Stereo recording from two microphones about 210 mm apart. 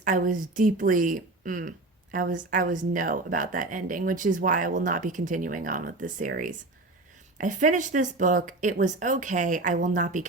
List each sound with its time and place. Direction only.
0.0 s speech: 40° right (ahead or behind)